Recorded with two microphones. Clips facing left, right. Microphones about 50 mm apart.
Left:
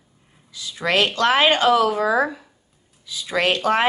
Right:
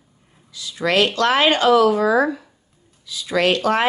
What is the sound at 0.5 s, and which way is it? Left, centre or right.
Speech, left.